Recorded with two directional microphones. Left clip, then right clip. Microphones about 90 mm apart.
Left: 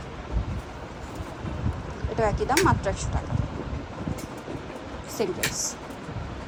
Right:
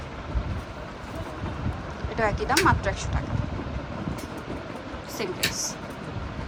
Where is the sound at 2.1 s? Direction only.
40° left (ahead or behind).